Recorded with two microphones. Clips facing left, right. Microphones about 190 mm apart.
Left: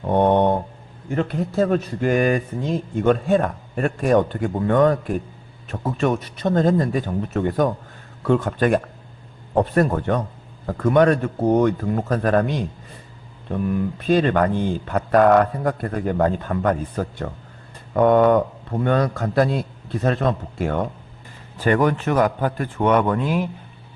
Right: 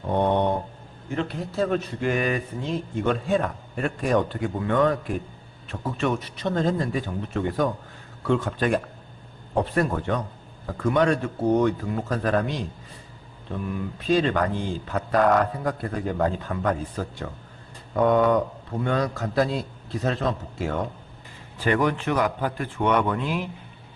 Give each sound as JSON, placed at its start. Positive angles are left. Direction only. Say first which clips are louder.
{"t": 0.1, "sound": "mantra", "louder": "left 5 dB", "side_deg": 55}
{"t": 1.1, "sound": "speech", "louder": "left 6 dB", "side_deg": 45}
{"t": 14.1, "sound": "a man's voice", "louder": "left 4 dB", "side_deg": 55}